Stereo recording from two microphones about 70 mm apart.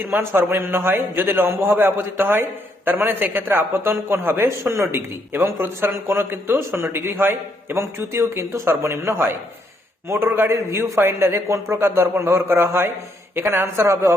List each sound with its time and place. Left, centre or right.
0.0 s a man's voice: right
10.7 s a man's voice: right